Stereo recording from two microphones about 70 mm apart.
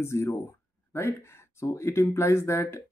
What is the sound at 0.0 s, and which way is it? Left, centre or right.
Speech, left.